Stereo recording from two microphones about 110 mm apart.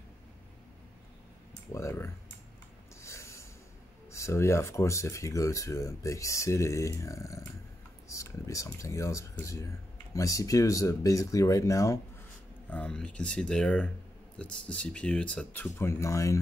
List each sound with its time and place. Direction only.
1.7 s speech: 25° left (ahead or behind)
3.0 s snort: 25° left (ahead or behind)
4.1 s speech: 25° left (ahead or behind)
12.6 s speech: 10° left (ahead or behind); by 16.3 s 30° left (ahead or behind)